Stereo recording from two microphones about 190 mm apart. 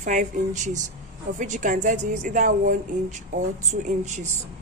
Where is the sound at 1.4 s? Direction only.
40° right (ahead or behind).